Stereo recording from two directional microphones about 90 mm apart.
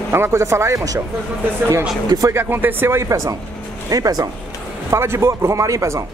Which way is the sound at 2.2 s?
30° right (ahead or behind).